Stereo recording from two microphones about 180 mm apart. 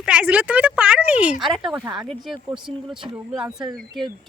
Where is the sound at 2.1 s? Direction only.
Centre (ahead or behind).